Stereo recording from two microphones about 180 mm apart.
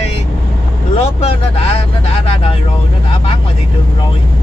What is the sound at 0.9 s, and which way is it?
Vehicle, 35° left (ahead or behind).